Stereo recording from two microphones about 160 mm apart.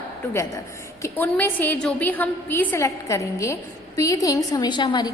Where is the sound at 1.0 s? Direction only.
10° left (ahead or behind).